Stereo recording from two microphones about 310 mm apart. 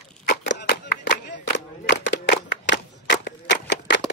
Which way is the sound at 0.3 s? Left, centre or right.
Left.